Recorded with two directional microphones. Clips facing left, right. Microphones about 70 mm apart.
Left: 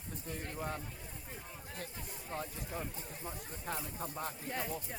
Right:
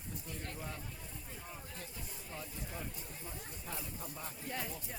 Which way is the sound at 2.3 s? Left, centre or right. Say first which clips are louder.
Left 5 dB; left.